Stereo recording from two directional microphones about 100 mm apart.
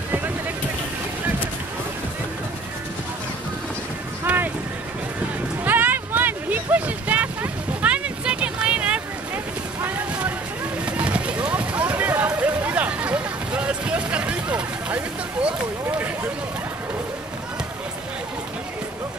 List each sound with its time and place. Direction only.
4.2 s boat: 20° right (ahead or behind)
5.6 s a sound: 20° right (ahead or behind)
10.9 s run: 10° right (ahead or behind)